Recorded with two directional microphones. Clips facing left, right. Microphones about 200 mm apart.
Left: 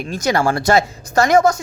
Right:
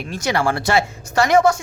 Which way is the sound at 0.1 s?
40° left (ahead or behind).